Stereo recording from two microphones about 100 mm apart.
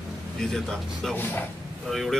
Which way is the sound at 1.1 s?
20° left (ahead or behind).